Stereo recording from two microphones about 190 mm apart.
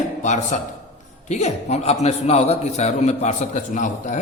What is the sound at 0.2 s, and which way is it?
A man's voice, 40° left (ahead or behind).